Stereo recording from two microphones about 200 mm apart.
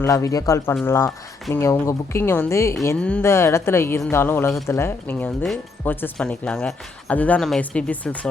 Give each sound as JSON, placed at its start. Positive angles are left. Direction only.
{"t": 0.0, "sound": "speech", "side_deg": 15}